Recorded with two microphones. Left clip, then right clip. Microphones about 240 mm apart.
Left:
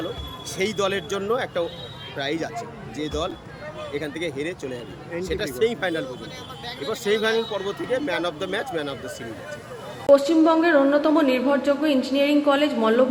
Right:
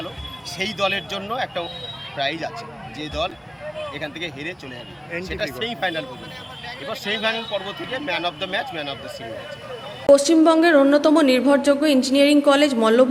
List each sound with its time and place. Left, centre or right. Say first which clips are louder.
0.6 s a man's voice: right 1 dB; centre
10.1 s a woman's voice: right 2 dB; right